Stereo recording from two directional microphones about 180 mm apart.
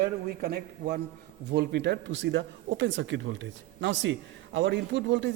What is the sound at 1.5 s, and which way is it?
A man's voice, 70° right (ahead or behind).